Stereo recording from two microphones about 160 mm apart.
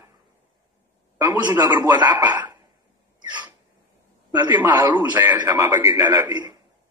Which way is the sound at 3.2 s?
25° right (ahead or behind).